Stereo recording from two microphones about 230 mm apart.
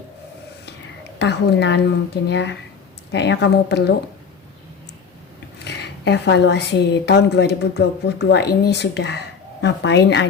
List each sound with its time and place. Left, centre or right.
1.2 s a woman's voice: left
5.5 s a woman's voice: left